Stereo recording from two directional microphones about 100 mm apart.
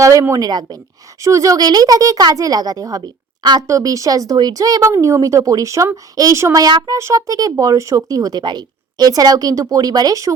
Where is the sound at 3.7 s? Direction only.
35° right (ahead or behind).